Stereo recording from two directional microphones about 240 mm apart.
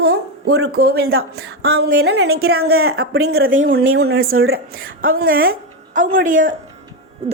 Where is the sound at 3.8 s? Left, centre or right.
Right.